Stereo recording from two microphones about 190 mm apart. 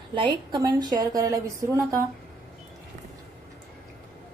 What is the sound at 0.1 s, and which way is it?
A woman's voice, 25° right (ahead or behind).